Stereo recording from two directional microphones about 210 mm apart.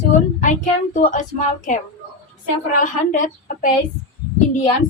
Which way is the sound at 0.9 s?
35° left (ahead or behind).